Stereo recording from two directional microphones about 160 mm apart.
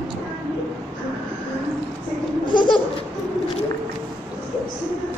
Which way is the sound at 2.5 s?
30° left (ahead or behind).